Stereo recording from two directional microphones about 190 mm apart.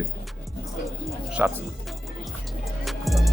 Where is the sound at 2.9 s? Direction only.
Centre (ahead or behind).